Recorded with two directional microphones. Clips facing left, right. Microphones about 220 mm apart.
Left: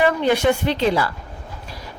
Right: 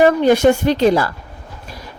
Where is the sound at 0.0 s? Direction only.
45° right (ahead or behind).